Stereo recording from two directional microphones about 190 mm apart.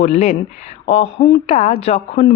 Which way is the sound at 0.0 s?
35° left (ahead or behind).